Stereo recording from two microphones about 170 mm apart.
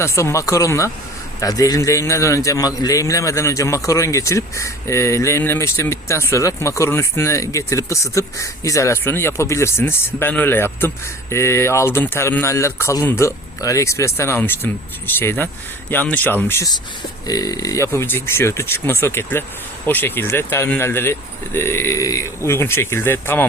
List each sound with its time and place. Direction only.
0.0 s a man's voice: 15° left (ahead or behind)